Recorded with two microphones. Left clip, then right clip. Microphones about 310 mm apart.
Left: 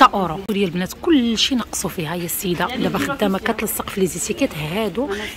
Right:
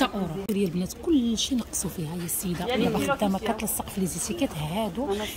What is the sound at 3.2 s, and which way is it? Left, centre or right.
Speech, left.